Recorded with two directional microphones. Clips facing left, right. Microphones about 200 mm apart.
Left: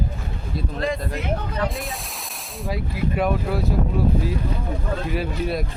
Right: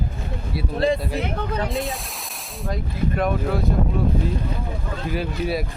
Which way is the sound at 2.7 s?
5° left (ahead or behind).